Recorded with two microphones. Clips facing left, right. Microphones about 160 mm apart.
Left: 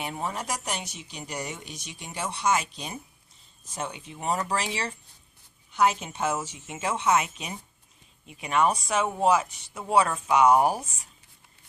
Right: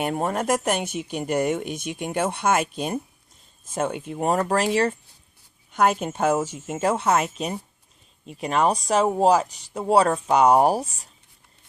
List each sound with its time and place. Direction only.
0.0 s speech: 50° right (ahead or behind); by 11.1 s 35° right (ahead or behind)